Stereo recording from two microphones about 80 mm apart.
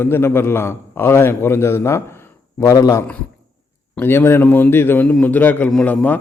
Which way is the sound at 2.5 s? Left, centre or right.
Left.